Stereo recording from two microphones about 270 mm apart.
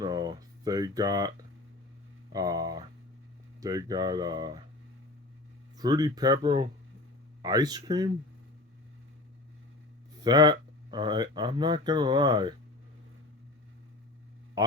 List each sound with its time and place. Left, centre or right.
0.0 s speech: centre
2.3 s speech: centre
5.7 s speech: centre
10.2 s speech: centre